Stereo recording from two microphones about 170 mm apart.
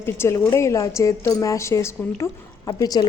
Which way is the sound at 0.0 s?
15° left (ahead or behind).